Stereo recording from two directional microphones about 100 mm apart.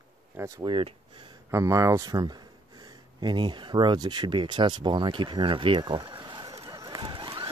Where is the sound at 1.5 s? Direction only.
30° right (ahead or behind).